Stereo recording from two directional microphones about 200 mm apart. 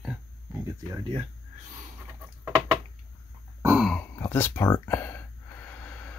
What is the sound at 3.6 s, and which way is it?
Throat clearing, 5° right (ahead or behind).